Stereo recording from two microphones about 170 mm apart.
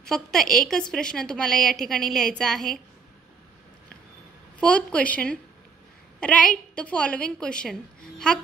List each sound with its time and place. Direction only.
0.0 s a woman's voice: 5° left (ahead or behind)
4.6 s a woman's voice: 10° left (ahead or behind)